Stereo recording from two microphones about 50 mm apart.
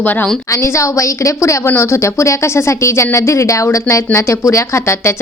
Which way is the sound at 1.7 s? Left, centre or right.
Left.